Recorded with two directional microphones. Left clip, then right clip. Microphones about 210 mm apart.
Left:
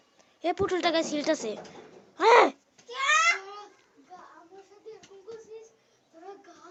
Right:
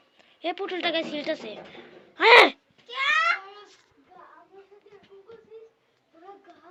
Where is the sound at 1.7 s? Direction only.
10° left (ahead or behind).